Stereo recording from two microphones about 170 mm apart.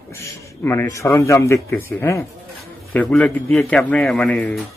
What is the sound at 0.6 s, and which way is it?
A man's voice, 15° left (ahead or behind).